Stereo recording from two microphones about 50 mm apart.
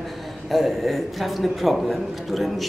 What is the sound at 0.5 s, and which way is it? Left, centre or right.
A man's voice, centre.